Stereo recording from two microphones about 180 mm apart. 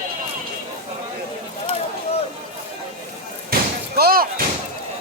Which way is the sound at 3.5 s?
55° right (ahead or behind).